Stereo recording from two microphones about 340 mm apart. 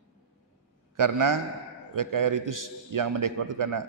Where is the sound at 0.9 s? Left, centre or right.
Right.